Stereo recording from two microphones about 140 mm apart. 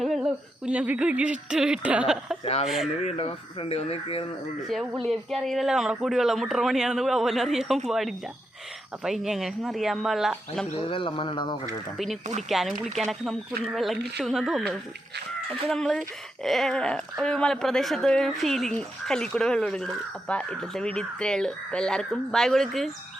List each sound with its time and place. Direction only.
0.0 s speech: 5° right (ahead or behind)
2.4 s speech: 45° left (ahead or behind)
2.6 s speech: centre (ahead or behind)
3.0 s speech: 45° left (ahead or behind)
4.7 s speech: centre (ahead or behind)
10.8 s speech: 40° left (ahead or behind)
12.5 s speech: centre (ahead or behind)
15.7 s speech: 5° left (ahead or behind)